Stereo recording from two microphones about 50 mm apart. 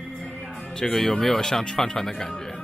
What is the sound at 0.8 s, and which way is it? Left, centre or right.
Speech, centre.